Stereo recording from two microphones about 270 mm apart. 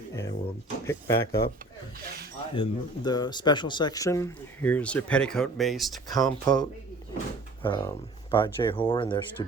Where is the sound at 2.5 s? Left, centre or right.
Centre.